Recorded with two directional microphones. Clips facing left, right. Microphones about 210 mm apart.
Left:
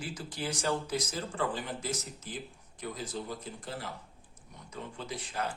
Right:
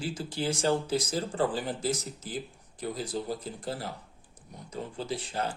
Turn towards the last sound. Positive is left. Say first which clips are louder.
# right 4 dB
turn(degrees=-30)  # may be behind; listen again after turning